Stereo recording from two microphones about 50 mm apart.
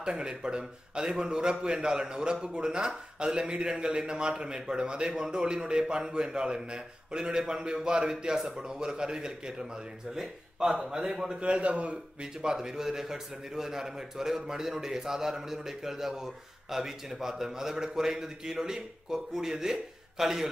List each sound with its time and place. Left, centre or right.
0.0 s a man's voice: centre
11.3 s a man's voice: right